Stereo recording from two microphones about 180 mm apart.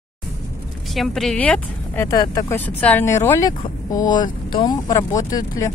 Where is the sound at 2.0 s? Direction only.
20° left (ahead or behind).